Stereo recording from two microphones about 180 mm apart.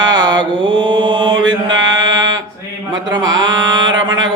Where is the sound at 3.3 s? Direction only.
90° right.